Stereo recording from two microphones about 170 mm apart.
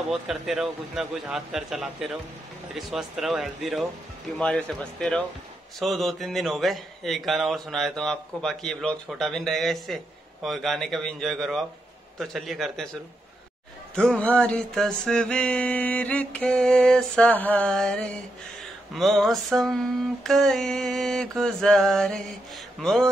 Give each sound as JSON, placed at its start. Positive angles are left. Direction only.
{"t": 0.1, "sound": "speech", "side_deg": 0}
{"t": 13.9, "sound": "a sound", "side_deg": 5}
{"t": 18.9, "sound": "speech", "side_deg": 0}